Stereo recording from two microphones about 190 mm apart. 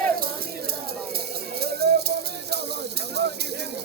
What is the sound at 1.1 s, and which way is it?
Music, 55° right (ahead or behind).